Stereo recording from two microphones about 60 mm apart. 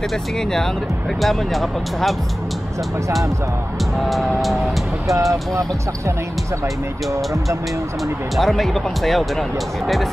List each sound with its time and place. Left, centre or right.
0.4 s speech: centre
4.0 s speech: centre
5.3 s speech: right
8.4 s speech: centre